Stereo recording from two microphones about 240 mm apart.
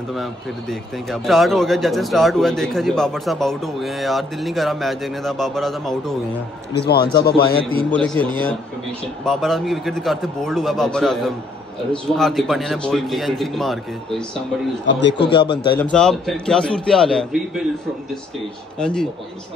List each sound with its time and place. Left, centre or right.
0.1 s a man's voice: centre
6.7 s a man's voice: left
7.9 s a man's voice: centre
14.9 s a man's voice: left
15.2 s speech: centre
15.8 s a man's voice: centre
18.8 s a man's voice: centre